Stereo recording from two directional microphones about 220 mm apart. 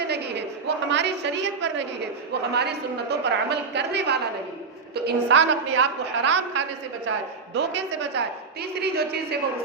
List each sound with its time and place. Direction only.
0.0 s a woman's voice: 50° right (ahead or behind)
7.5 s a woman's voice: 50° right (ahead or behind)